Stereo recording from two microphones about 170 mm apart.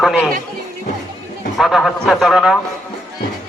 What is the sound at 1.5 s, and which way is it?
A man's voice, centre (ahead or behind).